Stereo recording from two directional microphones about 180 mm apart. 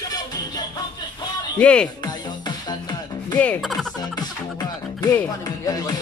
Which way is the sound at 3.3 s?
10° left (ahead or behind).